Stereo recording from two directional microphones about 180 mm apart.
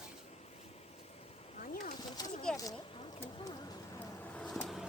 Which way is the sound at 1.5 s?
45° left (ahead or behind).